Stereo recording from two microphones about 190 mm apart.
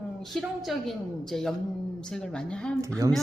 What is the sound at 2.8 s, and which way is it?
Speech, 15° right (ahead or behind).